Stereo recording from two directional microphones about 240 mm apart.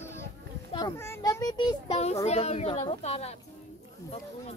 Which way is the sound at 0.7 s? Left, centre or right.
Centre.